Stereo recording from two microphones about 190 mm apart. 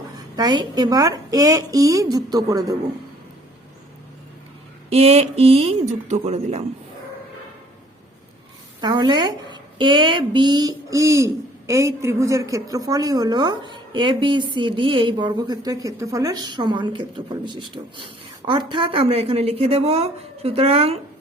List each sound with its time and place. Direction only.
0.3 s a woman's voice: 20° right (ahead or behind)
4.9 s speech: 30° right (ahead or behind)
8.8 s a woman's voice: 20° right (ahead or behind)